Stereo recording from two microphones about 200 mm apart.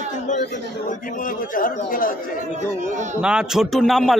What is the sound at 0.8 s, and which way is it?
Speech, 45° left (ahead or behind).